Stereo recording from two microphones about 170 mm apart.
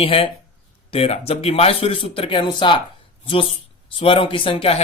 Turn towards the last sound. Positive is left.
turn(degrees=35)  # may be behind; listen again after turning